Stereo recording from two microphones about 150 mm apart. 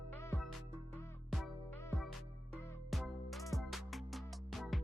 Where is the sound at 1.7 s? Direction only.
15° left (ahead or behind).